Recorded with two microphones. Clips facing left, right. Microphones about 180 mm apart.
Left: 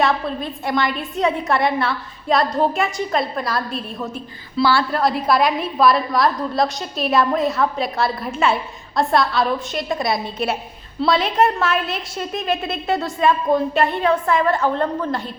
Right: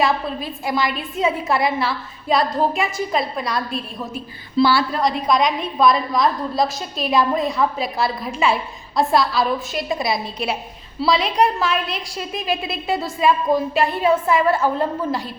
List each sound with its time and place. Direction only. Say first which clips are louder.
0.0 s a woman's voice: left 1 dB; centre (ahead or behind)